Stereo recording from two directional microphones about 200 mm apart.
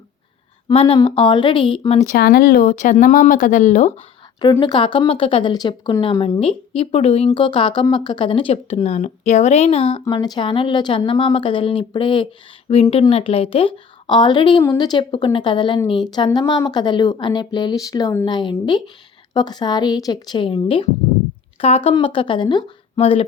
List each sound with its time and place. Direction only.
0.7 s speech: 30° left (ahead or behind)
2.1 s speech: 50° left (ahead or behind)
4.6 s speech: 25° left (ahead or behind)